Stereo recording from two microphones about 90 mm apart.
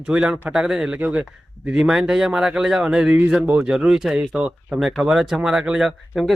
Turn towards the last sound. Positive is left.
turn(degrees=-5)  # may be behind; listen again after turning